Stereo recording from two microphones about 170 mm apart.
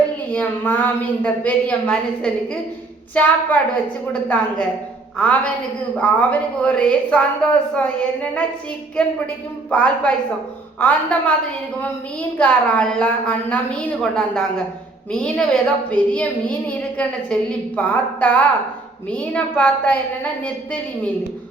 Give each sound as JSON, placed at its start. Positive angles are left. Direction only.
{"t": 0.3, "sound": "a woman's voice", "side_deg": 10}
{"t": 12.4, "sound": "a woman's voice", "side_deg": 5}